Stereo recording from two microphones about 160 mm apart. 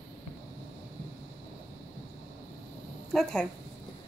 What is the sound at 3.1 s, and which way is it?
Speech, 5° left (ahead or behind).